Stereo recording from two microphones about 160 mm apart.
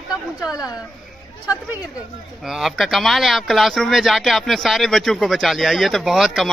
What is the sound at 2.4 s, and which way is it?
Speech, centre (ahead or behind).